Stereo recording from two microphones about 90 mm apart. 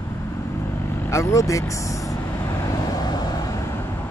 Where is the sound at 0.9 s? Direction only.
30° left (ahead or behind).